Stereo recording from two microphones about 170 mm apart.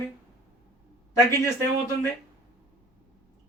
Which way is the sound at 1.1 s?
15° left (ahead or behind).